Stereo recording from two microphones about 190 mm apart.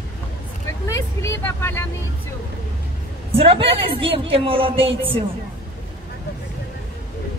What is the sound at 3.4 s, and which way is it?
A woman's voice, 30° right (ahead or behind).